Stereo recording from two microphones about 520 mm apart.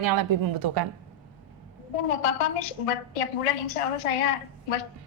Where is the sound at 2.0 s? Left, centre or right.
Left.